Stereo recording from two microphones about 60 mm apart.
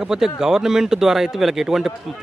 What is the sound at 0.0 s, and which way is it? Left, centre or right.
A man's voice, centre.